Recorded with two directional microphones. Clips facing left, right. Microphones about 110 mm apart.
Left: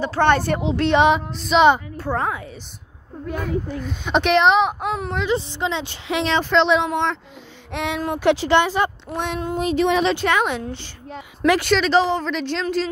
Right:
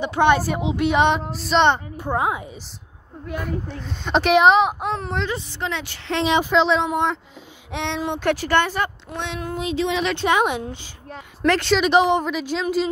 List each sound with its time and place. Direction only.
0.0 s a woman's voice: 15° right (ahead or behind)
0.9 s a woman's voice: centre (ahead or behind)
2.0 s a woman's voice: 15° right (ahead or behind)
3.6 s a woman's voice: 5° left (ahead or behind)
5.3 s speech: 20° left (ahead or behind)
6.2 s a woman's voice: 10° right (ahead or behind)
8.3 s speech: 15° left (ahead or behind)
9.1 s speech: 45° left (ahead or behind)
10.2 s a woman's voice: 15° right (ahead or behind)
11.4 s speech: 10° left (ahead or behind)
11.7 s a woman's voice: 15° right (ahead or behind)